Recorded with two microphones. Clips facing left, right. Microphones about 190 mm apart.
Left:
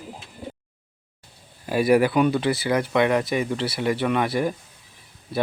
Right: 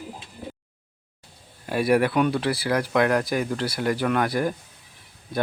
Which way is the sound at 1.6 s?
Centre (ahead or behind).